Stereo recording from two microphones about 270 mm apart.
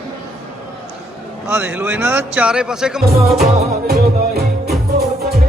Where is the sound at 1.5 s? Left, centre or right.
Centre.